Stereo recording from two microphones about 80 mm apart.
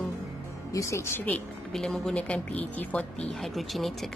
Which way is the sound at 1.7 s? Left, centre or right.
Centre.